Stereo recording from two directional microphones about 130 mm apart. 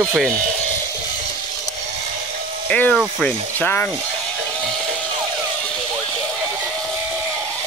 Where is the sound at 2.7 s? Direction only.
10° left (ahead or behind).